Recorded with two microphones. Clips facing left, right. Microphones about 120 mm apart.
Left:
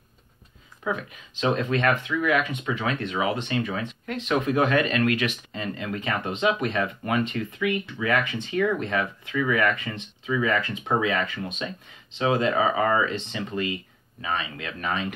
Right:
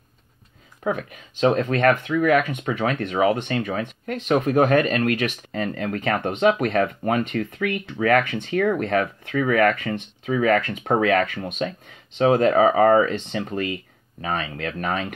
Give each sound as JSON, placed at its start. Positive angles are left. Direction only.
{"t": 0.8, "sound": "speech", "side_deg": -45}